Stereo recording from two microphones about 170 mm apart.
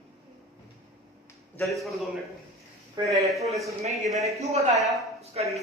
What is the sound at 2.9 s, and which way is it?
Speech, 20° right (ahead or behind).